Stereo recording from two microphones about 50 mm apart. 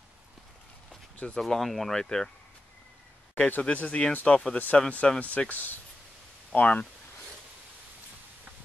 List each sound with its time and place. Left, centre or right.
1.1 s a sound: left
1.4 s speech: centre
3.3 s speech: left
5.2 s speech: left